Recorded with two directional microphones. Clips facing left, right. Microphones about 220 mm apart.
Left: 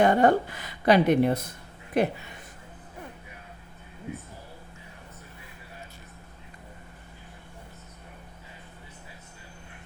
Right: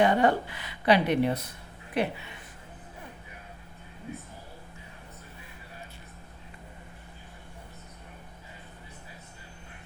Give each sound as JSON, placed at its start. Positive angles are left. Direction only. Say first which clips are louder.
{"t": 0.0, "sound": "speech", "louder": "left 3 dB", "side_deg": 45}